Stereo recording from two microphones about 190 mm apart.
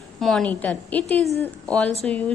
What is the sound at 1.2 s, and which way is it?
Speech, 35° right (ahead or behind).